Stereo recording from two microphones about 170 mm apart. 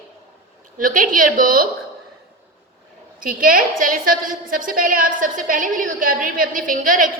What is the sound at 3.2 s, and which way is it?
A woman's voice, 55° right (ahead or behind).